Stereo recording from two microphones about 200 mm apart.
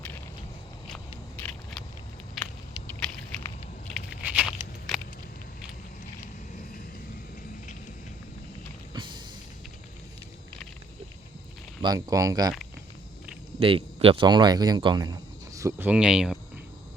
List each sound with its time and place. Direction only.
0.9 s biting: 5° left (ahead or behind)
2.4 s a sound: centre (ahead or behind)
4.2 s a sound: 5° right (ahead or behind)
8.9 s music: 20° right (ahead or behind)
11.8 s speech: 20° right (ahead or behind)
13.6 s speech: 30° right (ahead or behind); by 16.4 s 5° right (ahead or behind)